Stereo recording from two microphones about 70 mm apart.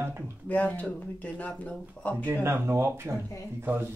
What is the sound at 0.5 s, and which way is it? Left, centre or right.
Speech, left.